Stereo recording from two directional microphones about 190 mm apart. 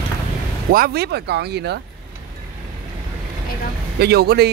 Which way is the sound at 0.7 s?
50° right (ahead or behind).